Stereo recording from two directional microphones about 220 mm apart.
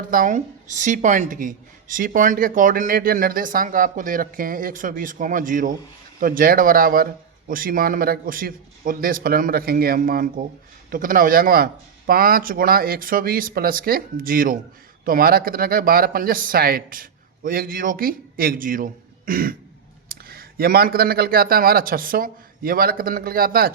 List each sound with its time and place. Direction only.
0.1 s a woman's voice: 35° right (ahead or behind)